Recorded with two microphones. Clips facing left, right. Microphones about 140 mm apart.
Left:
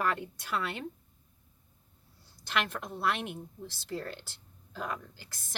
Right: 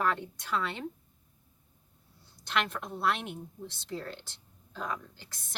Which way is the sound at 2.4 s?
Centre (ahead or behind).